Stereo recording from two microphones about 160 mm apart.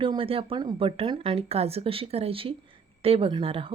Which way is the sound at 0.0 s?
35° right (ahead or behind).